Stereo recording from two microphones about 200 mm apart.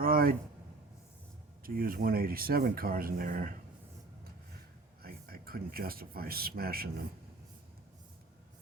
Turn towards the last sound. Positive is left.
turn(degrees=-50)  # may be behind; listen again after turning